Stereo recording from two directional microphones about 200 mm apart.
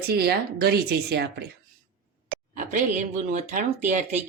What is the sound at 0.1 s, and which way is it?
Speech, 50° right (ahead or behind).